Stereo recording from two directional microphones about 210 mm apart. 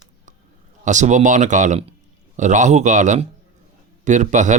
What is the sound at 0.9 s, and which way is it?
Speech, 35° right (ahead or behind).